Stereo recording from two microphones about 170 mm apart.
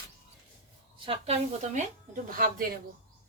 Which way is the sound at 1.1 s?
40° right (ahead or behind).